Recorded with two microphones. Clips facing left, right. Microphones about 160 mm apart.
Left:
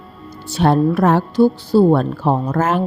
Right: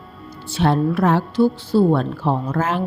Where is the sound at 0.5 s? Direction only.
45° left (ahead or behind).